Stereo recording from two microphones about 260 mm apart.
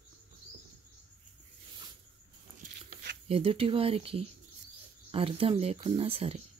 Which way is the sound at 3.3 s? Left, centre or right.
Right.